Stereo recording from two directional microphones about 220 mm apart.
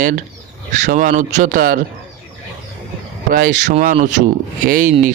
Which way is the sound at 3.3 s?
35° right (ahead or behind).